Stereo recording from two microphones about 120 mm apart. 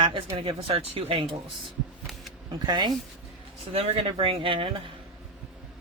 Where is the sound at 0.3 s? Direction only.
50° right (ahead or behind).